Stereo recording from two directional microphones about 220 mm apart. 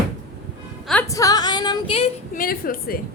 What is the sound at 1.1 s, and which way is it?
Female singing, 15° left (ahead or behind).